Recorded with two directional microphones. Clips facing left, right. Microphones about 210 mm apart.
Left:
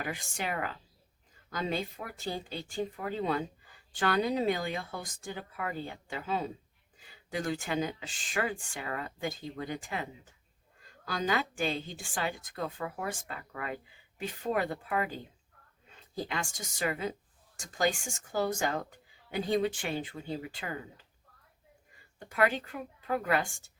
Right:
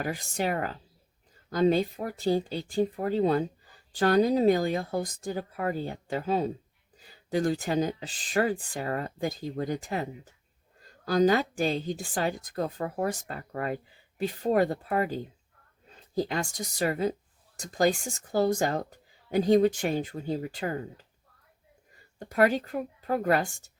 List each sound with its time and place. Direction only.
0.0 s a woman's voice: 40° right (ahead or behind)
21.9 s speech: 40° right (ahead or behind)